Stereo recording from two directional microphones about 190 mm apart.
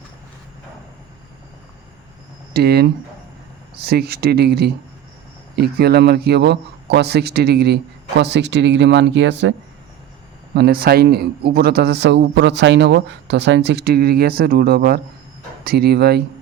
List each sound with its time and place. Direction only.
2.5 s speech: 55° right (ahead or behind)
10.5 s speech: 55° right (ahead or behind)